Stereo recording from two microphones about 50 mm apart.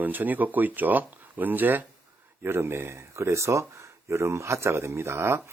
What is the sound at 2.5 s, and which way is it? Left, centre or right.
Speech, right.